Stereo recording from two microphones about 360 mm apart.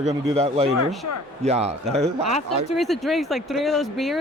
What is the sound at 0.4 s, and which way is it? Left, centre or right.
Speech, centre.